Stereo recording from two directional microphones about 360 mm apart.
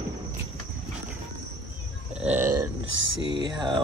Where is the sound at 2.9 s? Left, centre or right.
Right.